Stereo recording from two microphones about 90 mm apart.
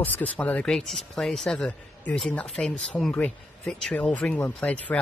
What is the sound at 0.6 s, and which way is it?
Speech, 5° left (ahead or behind).